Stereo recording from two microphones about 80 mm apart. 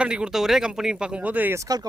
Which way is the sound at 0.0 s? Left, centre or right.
Centre.